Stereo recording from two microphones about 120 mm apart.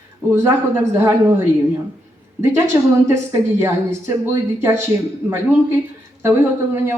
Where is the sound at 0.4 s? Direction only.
25° right (ahead or behind).